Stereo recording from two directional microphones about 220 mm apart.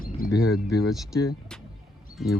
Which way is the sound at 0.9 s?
Centre (ahead or behind).